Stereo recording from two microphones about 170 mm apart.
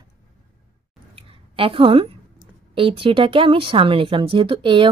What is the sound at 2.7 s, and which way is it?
Speech, 30° right (ahead or behind).